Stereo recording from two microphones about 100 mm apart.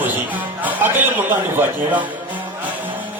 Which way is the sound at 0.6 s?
15° right (ahead or behind).